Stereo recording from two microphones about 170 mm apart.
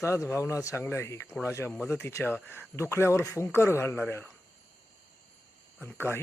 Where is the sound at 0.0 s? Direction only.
15° left (ahead or behind).